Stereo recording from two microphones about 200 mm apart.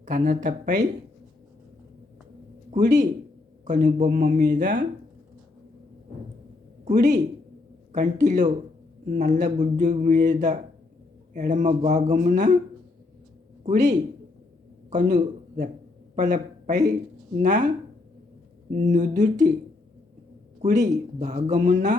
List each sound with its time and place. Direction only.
0.0 s speech: 40° right (ahead or behind)
2.6 s a man's voice: 35° right (ahead or behind)
6.8 s speech: 35° right (ahead or behind)
13.7 s a man's voice: 35° right (ahead or behind)
18.8 s speech: 35° right (ahead or behind)
21.2 s speech: 35° right (ahead or behind)